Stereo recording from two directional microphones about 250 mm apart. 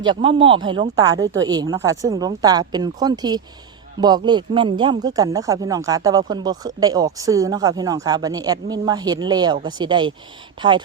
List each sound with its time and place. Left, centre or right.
0.0 s speech: centre